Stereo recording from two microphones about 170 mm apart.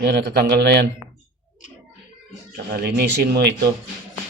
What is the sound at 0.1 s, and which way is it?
Speech, 75° right (ahead or behind).